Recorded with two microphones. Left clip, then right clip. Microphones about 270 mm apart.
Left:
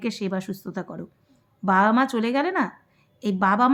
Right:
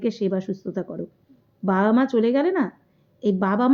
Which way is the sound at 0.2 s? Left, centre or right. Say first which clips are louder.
Right 4 dB; centre.